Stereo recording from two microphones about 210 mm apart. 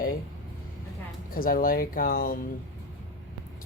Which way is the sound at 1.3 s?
40° left (ahead or behind).